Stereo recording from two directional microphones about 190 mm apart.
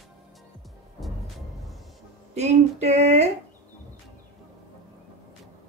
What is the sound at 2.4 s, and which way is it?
Speech, 35° right (ahead or behind).